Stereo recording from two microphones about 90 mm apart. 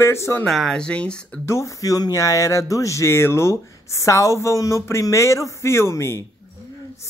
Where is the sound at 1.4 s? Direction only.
35° left (ahead or behind).